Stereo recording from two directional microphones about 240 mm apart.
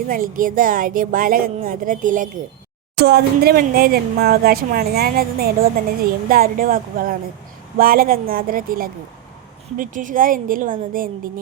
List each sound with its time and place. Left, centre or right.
0.1 s speech: right